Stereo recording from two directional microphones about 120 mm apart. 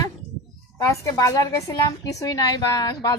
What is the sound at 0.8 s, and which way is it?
A woman's voice, 30° left (ahead or behind).